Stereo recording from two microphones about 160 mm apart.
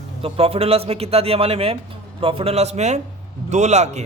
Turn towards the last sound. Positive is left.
turn(degrees=-45)  # may be behind; listen again after turning